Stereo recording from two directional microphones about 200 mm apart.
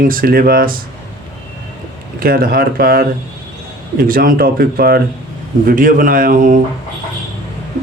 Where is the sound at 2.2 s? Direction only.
45° right (ahead or behind).